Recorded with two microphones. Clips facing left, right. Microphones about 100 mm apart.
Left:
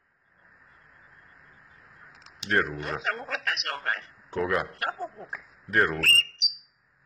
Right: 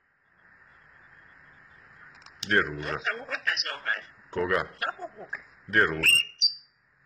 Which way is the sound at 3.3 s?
75° left (ahead or behind).